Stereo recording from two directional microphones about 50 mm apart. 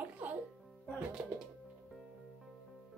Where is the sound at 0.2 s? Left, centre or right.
Right.